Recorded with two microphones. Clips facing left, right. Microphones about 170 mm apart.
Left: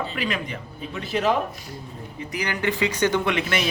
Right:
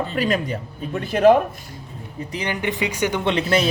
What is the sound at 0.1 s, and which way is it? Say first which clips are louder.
Speech: right 6 dB; 40° right (ahead or behind).